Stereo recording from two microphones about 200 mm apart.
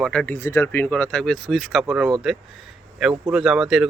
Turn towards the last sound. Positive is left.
turn(degrees=0)  # may be behind; listen again after turning